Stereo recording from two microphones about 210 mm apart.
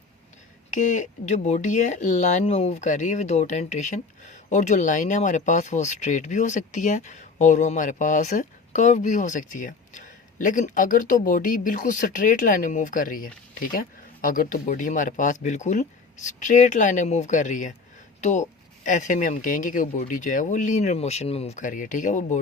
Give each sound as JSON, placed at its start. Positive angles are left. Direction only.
{"t": 0.7, "sound": "speech", "side_deg": 35}